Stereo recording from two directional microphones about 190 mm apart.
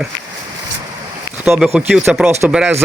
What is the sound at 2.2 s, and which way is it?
Speech, 15° right (ahead or behind).